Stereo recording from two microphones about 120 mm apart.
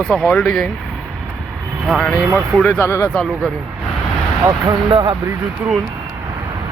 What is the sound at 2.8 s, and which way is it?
Speech, 20° left (ahead or behind).